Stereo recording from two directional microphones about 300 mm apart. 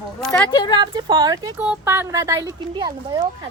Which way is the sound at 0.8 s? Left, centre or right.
Centre.